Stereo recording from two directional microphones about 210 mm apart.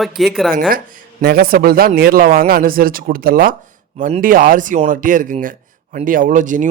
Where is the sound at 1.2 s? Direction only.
45° right (ahead or behind).